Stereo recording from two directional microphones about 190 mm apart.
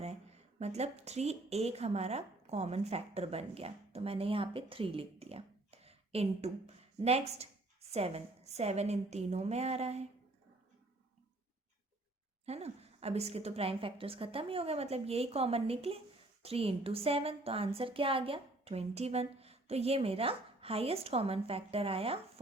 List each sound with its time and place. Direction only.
0.6 s a woman's voice: 35° right (ahead or behind)
12.5 s a woman's voice: 35° right (ahead or behind)